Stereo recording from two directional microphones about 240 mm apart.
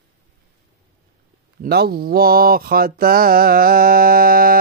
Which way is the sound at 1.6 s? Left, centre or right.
Right.